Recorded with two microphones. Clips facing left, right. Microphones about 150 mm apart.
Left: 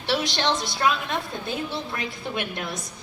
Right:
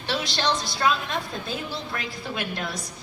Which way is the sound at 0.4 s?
20° left (ahead or behind).